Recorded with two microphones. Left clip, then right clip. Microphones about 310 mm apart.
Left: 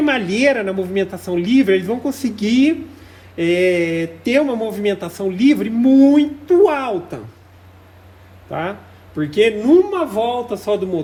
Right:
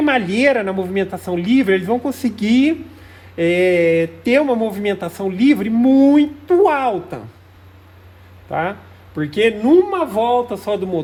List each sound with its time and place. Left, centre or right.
0.0 s speech: right
8.4 s speech: right